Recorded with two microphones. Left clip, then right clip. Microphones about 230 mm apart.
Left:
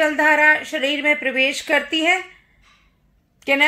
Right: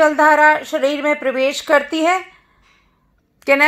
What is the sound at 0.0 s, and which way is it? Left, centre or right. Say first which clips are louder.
Speech: right 4 dB; centre.